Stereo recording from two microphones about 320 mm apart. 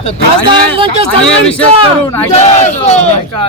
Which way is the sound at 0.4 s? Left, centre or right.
Centre.